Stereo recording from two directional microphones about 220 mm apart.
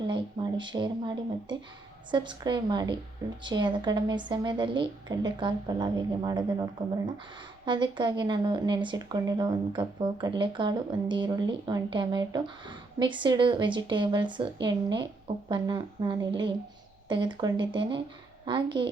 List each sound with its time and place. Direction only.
0.0 s speech: 20° right (ahead or behind)